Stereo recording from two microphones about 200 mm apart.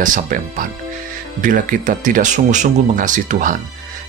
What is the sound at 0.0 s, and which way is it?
Speech, 40° right (ahead or behind).